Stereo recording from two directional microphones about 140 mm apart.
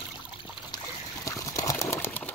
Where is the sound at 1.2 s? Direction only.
25° left (ahead or behind).